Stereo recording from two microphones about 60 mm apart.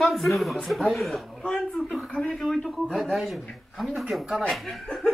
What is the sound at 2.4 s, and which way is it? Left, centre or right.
Speech, centre.